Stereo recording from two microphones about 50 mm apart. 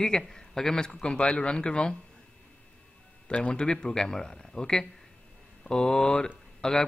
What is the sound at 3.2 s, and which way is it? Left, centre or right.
A man's voice, left.